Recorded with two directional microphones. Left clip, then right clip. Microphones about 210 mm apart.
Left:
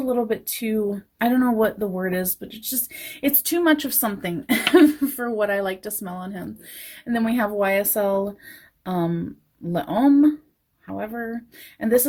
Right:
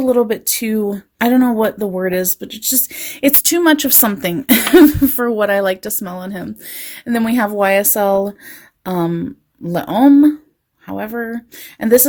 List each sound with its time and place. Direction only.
0.0 s speech: 45° right (ahead or behind)